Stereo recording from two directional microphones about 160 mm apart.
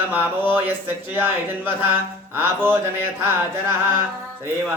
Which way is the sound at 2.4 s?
15° right (ahead or behind).